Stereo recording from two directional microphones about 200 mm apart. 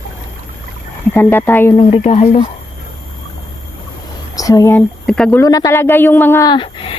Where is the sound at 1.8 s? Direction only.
30° left (ahead or behind).